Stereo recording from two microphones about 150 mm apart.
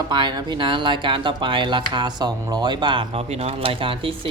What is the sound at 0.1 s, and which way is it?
Speech, 30° right (ahead or behind).